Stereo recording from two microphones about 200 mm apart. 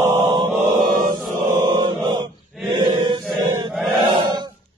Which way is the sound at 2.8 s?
20° right (ahead or behind).